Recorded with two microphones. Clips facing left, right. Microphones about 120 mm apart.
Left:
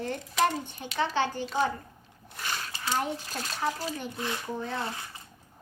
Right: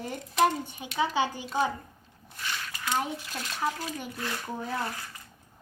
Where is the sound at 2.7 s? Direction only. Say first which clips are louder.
Even; 30° left (ahead or behind).